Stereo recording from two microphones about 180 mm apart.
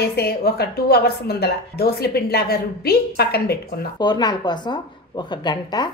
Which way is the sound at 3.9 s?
25° left (ahead or behind).